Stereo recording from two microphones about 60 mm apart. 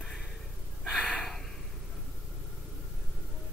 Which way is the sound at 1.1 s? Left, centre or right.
Centre.